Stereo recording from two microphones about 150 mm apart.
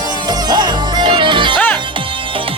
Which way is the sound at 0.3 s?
30° right (ahead or behind).